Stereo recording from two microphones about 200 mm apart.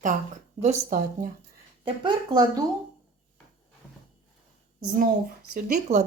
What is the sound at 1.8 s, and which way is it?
Speech, 25° right (ahead or behind).